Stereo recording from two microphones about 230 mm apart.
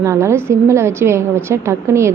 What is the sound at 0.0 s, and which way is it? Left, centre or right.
A woman's voice, centre.